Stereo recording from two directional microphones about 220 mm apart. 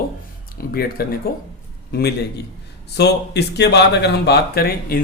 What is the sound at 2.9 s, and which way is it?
Speech, 50° left (ahead or behind).